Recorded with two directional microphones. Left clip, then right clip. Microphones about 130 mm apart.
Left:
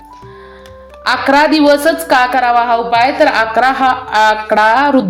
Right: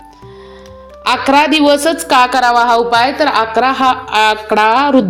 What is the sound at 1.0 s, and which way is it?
A woman's voice, 40° right (ahead or behind).